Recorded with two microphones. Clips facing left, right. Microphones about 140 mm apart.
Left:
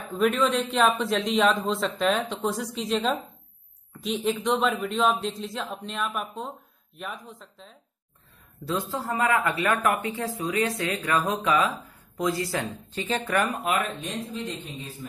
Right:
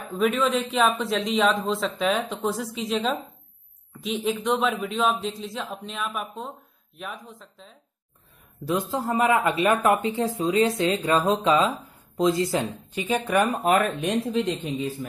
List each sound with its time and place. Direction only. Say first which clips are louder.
0.1 s speech: even; centre (ahead or behind)
8.6 s speech: right 3 dB; 15° right (ahead or behind)
13.5 s speech: right 5 dB; 45° right (ahead or behind)
14.3 s speech: right 9 dB; 90° right